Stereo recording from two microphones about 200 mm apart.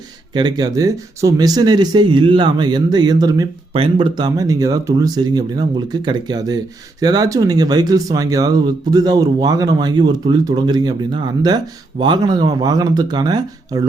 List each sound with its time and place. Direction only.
0.3 s speech: 20° right (ahead or behind)